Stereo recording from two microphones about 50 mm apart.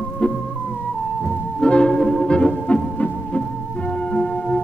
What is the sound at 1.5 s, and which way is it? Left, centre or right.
Music, centre.